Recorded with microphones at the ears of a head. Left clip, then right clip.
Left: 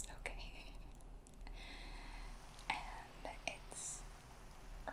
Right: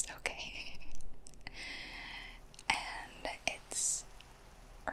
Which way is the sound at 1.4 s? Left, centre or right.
Right.